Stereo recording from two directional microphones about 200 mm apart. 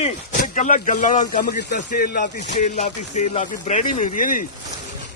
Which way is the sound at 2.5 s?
35° left (ahead or behind).